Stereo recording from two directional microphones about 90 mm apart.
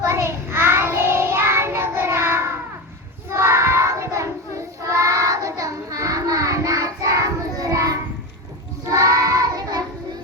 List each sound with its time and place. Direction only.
0.0 s child singing: 30° right (ahead or behind)